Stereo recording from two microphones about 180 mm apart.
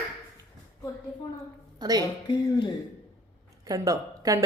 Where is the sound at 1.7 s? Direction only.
20° right (ahead or behind).